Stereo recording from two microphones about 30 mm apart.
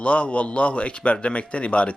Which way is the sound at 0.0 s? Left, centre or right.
Left.